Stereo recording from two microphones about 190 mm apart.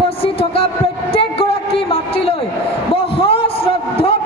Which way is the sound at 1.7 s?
30° left (ahead or behind).